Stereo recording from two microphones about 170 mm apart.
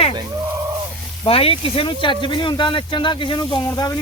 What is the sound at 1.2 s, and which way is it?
Speech, 35° left (ahead or behind).